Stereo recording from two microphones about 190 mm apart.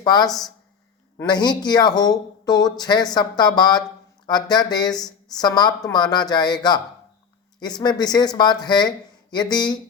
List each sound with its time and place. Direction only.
0.0 s speech: 20° left (ahead or behind)
0.3 s speech: centre (ahead or behind)
1.1 s speech: 20° left (ahead or behind)